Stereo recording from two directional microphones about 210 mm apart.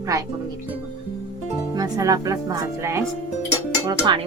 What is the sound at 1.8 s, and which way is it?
Speech, 15° right (ahead or behind).